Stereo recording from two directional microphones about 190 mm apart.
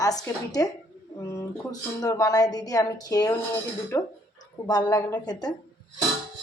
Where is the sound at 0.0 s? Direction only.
20° left (ahead or behind).